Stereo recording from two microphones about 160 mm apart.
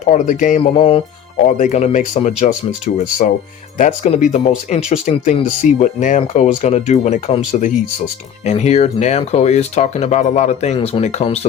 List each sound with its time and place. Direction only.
0.0 s speech: 50° left (ahead or behind)
0.6 s music: 35° left (ahead or behind)
1.5 s speech: 50° left (ahead or behind)
10.8 s music: 35° left (ahead or behind)
11.0 s speech: 45° left (ahead or behind)